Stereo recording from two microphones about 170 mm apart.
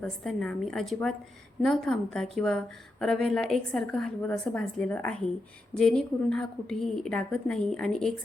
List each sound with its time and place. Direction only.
0.0 s a woman's voice: 5° left (ahead or behind)